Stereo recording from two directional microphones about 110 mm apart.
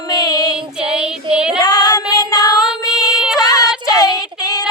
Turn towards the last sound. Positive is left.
turn(degrees=35)  # may be behind; listen again after turning